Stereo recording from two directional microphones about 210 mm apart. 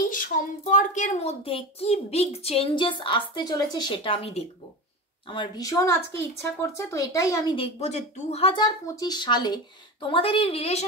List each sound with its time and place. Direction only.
0.1 s a woman's voice: 40° left (ahead or behind); by 7.6 s 20° left (ahead or behind)
7.8 s a woman's voice: 30° left (ahead or behind)